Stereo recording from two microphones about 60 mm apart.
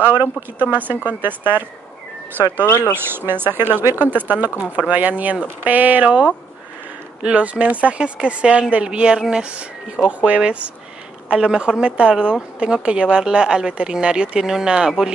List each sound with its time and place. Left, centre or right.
0.0 s speech: right
2.6 s speech: left
2.9 s a woman's voice: right; by 15.1 s centre